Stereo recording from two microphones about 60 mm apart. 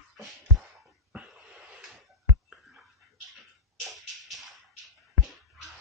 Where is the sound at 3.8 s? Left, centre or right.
Centre.